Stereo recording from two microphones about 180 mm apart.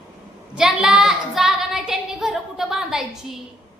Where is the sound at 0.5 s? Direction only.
5° right (ahead or behind).